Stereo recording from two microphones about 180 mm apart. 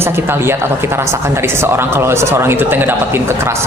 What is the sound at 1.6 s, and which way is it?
Speech, 15° right (ahead or behind).